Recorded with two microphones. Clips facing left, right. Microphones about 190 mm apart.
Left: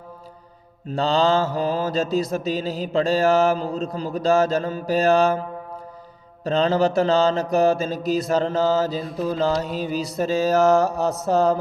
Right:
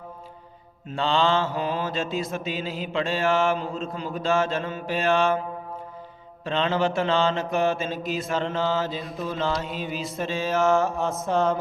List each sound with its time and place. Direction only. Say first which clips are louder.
0.9 s mantra: left 4 dB; 40° left (ahead or behind)
6.4 s mantra: left 5 dB; 40° left (ahead or behind)